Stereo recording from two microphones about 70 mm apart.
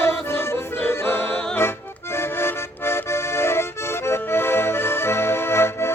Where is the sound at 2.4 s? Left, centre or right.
Left.